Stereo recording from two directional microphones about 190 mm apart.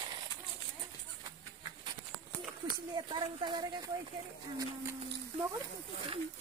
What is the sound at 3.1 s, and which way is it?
Speech, 25° right (ahead or behind).